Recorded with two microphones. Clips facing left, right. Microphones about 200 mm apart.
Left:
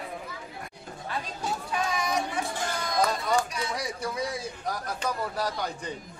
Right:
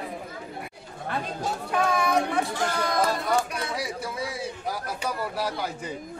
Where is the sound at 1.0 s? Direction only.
60° right (ahead or behind).